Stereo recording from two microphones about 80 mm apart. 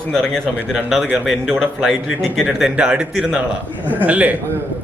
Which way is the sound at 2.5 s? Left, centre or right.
Centre.